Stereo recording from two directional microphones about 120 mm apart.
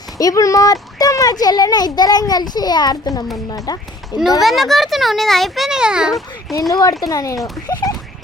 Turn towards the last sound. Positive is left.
turn(degrees=35)  # may be behind; listen again after turning